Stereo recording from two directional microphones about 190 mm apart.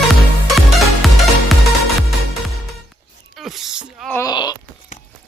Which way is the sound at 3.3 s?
Centre (ahead or behind).